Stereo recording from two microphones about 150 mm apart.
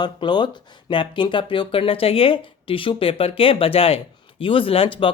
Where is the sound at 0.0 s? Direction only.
30° left (ahead or behind).